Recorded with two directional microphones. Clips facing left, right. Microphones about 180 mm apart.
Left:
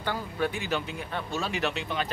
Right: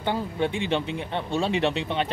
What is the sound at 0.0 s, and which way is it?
Speech, 25° right (ahead or behind).